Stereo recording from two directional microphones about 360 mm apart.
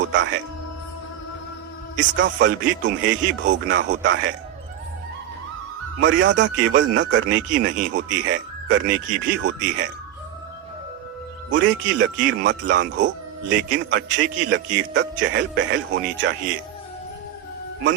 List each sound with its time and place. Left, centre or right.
0.0 s music: right
2.0 s speech: right
6.0 s speech: right
9.3 s speech: right
11.5 s speech: right